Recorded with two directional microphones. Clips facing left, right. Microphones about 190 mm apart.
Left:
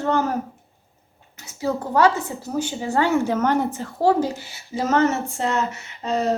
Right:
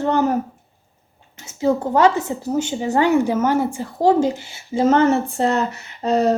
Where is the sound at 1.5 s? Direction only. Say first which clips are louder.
Right 6 dB; 20° right (ahead or behind).